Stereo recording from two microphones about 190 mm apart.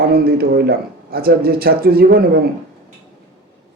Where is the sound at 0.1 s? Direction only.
55° right (ahead or behind).